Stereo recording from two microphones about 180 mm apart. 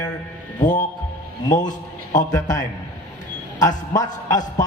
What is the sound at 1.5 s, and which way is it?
Speech, 45° left (ahead or behind).